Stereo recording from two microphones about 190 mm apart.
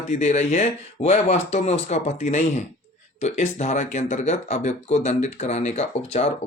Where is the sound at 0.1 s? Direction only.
35° left (ahead or behind).